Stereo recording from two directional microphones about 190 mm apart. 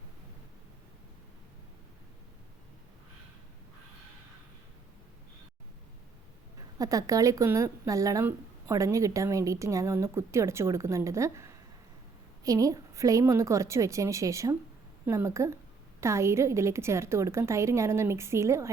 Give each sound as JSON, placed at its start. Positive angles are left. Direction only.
{"t": 6.7, "sound": "a woman's voice", "side_deg": -20}